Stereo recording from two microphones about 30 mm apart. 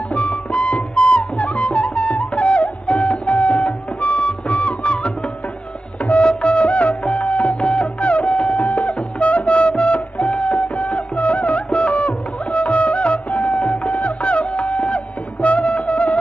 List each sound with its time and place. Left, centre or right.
0.1 s music: left
6.2 s music: left